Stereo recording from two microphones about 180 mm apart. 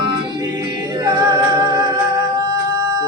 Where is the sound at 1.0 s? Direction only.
20° right (ahead or behind).